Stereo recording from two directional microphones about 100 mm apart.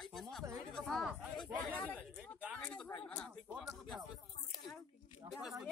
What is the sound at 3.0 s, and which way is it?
Speech, 10° left (ahead or behind).